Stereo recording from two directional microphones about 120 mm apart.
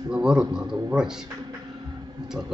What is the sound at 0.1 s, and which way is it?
Speech, 5° right (ahead or behind).